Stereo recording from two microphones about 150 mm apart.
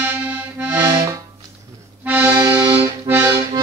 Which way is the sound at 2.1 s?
15° right (ahead or behind).